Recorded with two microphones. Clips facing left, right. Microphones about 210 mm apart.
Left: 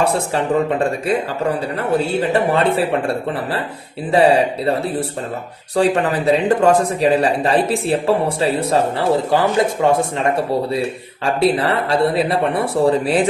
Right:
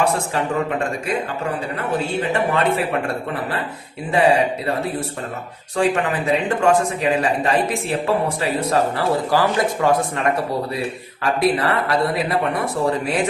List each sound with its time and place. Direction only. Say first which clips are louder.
0.0 s a man's voice: left 2 dB; 30° left (ahead or behind)
4.1 s a man's voice: left 3 dB; 35° left (ahead or behind)